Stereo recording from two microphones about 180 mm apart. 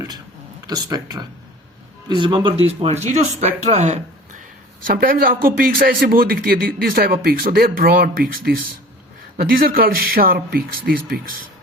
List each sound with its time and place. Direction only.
0.7 s speech: 20° right (ahead or behind); by 4.4 s 40° right (ahead or behind)
4.9 s speech: 55° right (ahead or behind)